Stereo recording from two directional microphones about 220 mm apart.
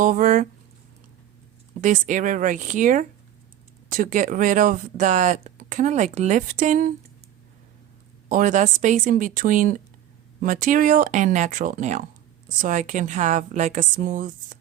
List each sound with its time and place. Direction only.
0.0 s speech: 35° right (ahead or behind)
1.8 s speech: 35° right (ahead or behind)
8.3 s speech: 35° right (ahead or behind)